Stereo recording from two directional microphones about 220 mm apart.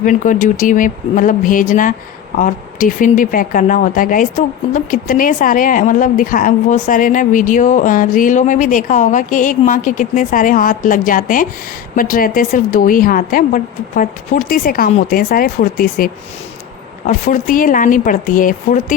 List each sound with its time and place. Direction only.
0.0 s speech: 35° left (ahead or behind)
17.1 s speech: 35° left (ahead or behind)